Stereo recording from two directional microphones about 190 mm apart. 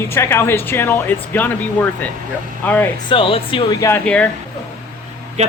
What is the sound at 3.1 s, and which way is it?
Speech, 30° left (ahead or behind).